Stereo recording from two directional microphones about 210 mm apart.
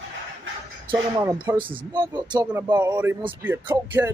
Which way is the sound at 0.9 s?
20° right (ahead or behind).